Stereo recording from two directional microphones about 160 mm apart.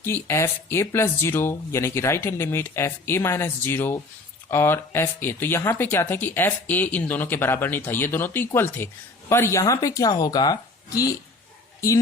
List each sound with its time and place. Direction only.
0.0 s speech: 15° left (ahead or behind)